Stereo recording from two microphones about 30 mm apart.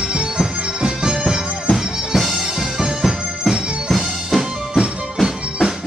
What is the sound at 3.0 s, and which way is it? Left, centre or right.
Music, centre.